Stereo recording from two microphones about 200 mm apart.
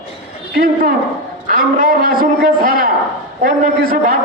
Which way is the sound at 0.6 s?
45° right (ahead or behind).